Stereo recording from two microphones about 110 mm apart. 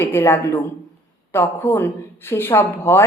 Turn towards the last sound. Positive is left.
turn(degrees=20)  # may be behind; listen again after turning